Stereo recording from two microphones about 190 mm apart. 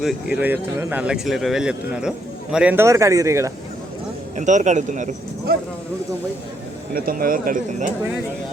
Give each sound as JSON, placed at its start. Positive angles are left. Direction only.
{"t": 0.0, "sound": "speech", "side_deg": -5}
{"t": 4.4, "sound": "speech", "side_deg": -40}
{"t": 6.9, "sound": "speech", "side_deg": -50}